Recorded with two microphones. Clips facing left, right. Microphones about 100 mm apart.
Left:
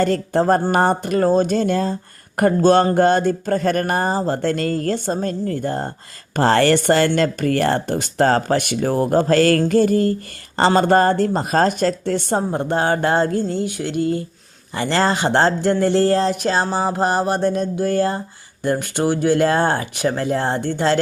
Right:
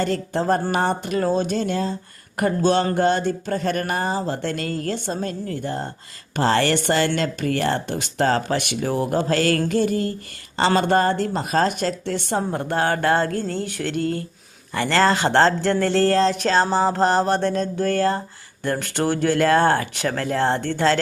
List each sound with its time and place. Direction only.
0.0 s speech: 45° left (ahead or behind)
12.4 s speech: 20° left (ahead or behind)